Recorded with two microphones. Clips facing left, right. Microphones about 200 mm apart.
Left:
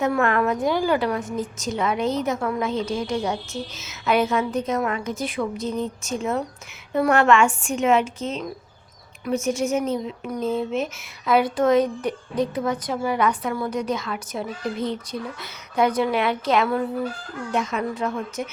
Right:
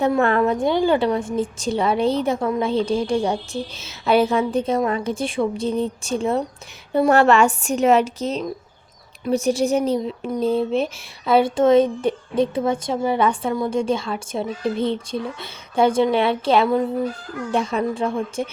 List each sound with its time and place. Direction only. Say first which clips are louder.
0.2 s a woman's voice: right 3 dB; 30° right (ahead or behind)